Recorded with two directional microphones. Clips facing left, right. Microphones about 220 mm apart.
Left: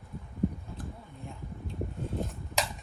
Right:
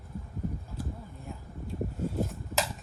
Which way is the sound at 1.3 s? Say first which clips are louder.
Right 2 dB; 5° right (ahead or behind).